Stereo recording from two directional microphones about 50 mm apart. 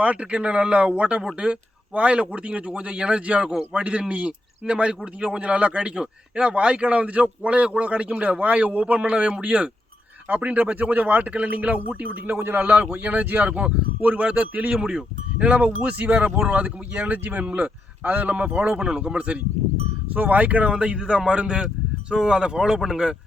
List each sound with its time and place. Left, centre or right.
0.0 s speech: right
18.7 s speech: centre
20.1 s speech: right
20.7 s speech: centre